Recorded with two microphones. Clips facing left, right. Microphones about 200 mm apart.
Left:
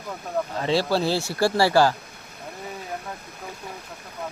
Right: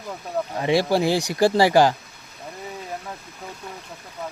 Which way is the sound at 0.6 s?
15° right (ahead or behind).